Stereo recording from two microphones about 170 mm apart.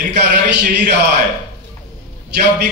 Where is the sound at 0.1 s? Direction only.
70° right (ahead or behind).